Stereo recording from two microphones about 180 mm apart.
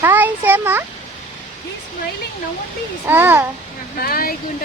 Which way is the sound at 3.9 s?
55° left (ahead or behind).